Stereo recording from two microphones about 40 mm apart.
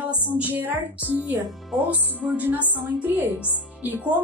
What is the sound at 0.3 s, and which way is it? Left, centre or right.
Speech, right.